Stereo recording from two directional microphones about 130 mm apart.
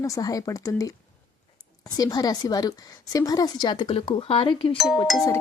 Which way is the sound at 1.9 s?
30° left (ahead or behind).